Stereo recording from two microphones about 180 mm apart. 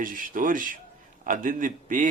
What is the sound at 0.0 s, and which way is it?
Speech, 50° right (ahead or behind).